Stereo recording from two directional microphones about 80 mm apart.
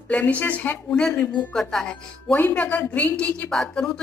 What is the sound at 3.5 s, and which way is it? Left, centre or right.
Speech, centre.